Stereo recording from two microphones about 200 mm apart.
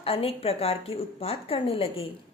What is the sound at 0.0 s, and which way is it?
A woman's voice, 30° left (ahead or behind).